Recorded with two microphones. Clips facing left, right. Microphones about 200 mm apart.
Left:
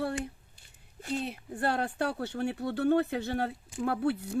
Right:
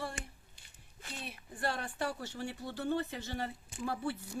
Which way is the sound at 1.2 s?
65° left (ahead or behind).